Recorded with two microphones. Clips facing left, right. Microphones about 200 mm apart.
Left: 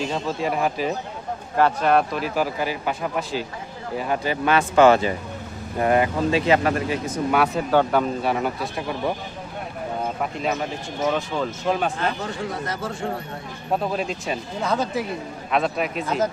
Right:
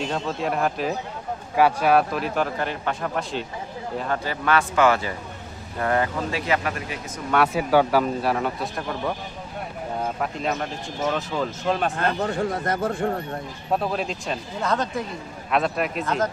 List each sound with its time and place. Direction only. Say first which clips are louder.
0.0 s a man's voice: left 1 dB; centre (ahead or behind); by 4.6 s 15° left (ahead or behind)
4.7 s speech: left 5 dB; 25° left (ahead or behind)
7.4 s speech: even; 10° right (ahead or behind)
10.2 s speech: left 1 dB; centre (ahead or behind)
11.9 s speech: right 3 dB; 55° right (ahead or behind)
13.7 s speech: left 1 dB; centre (ahead or behind)